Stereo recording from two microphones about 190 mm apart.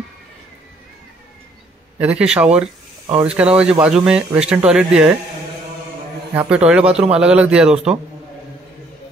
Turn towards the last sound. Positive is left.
turn(degrees=-5)  # may be behind; listen again after turning